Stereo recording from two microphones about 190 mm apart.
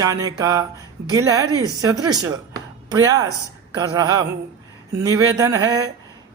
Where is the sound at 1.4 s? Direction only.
15° left (ahead or behind).